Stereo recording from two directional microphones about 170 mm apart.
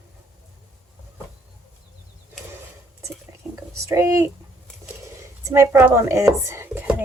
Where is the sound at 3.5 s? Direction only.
15° right (ahead or behind).